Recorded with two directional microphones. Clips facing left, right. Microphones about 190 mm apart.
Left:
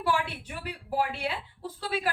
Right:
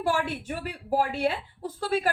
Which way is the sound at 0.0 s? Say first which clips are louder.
Right 2 dB; 45° right (ahead or behind).